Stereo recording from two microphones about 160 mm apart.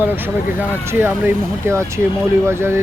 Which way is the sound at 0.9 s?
15° right (ahead or behind).